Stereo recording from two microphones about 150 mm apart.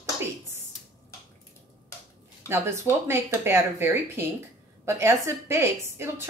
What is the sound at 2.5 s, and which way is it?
A woman's voice, 15° right (ahead or behind).